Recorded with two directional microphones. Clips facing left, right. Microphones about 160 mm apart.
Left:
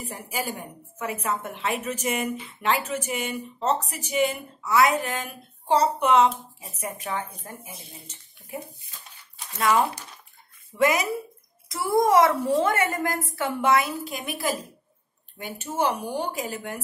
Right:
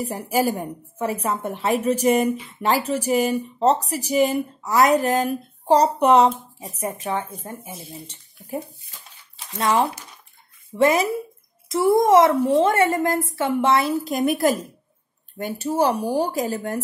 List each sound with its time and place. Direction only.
0.0 s speech: 40° right (ahead or behind)
6.7 s a woman's voice: 25° right (ahead or behind)
7.7 s speech: centre (ahead or behind)
9.5 s a woman's voice: 25° right (ahead or behind)